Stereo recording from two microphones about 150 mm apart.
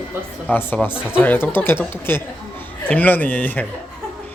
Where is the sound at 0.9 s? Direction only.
10° right (ahead or behind).